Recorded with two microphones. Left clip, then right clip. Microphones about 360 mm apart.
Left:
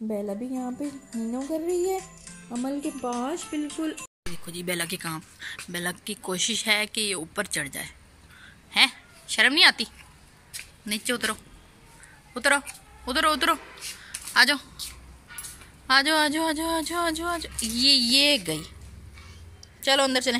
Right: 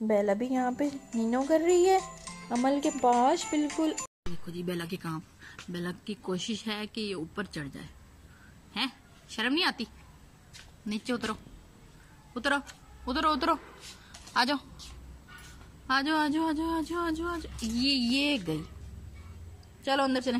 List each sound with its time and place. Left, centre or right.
0.1 s a woman's voice: right
0.5 s music: right
1.9 s speech: centre
4.6 s speech: centre
8.7 s speech: centre
10.9 s speech: centre
12.4 s a woman's voice: centre
15.9 s speech: centre
19.8 s speech: centre